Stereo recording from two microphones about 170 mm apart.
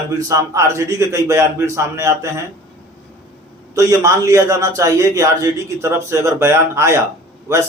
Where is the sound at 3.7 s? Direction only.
20° right (ahead or behind).